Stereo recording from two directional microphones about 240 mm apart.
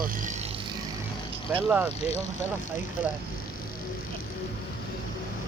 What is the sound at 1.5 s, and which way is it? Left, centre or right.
Speech, centre.